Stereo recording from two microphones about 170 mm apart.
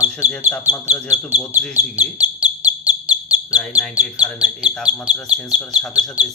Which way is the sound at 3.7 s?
10° right (ahead or behind).